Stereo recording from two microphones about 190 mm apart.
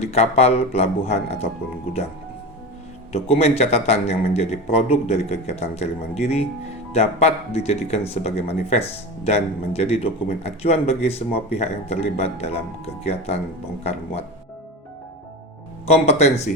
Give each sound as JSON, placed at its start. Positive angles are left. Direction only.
{"t": 0.0, "sound": "a man's voice", "side_deg": 35}
{"t": 3.1, "sound": "a man's voice", "side_deg": 30}
{"t": 15.9, "sound": "a man's voice", "side_deg": 35}